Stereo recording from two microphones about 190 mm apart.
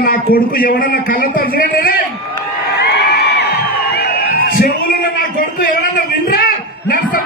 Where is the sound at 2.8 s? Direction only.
60° left (ahead or behind).